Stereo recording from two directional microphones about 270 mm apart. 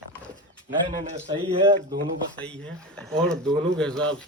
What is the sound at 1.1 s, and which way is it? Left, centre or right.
Speech, centre.